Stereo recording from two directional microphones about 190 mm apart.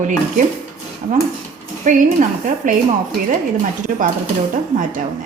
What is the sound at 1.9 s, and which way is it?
Speech, 45° right (ahead or behind).